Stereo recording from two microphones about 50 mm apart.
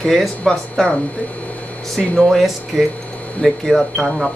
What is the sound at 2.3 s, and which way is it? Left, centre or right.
Speech, centre.